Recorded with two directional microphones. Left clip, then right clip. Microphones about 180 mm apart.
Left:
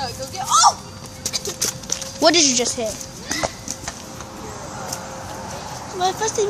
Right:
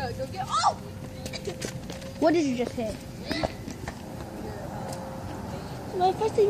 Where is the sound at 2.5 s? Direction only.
55° left (ahead or behind).